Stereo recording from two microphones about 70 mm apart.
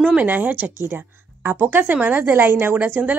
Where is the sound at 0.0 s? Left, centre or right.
Centre.